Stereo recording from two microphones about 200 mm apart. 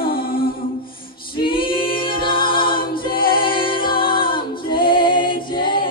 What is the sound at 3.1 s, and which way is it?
Music, 45° left (ahead or behind).